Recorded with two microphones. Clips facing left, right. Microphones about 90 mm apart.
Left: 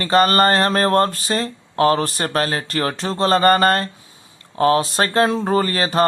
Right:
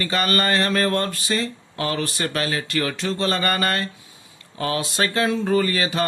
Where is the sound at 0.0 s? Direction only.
40° left (ahead or behind).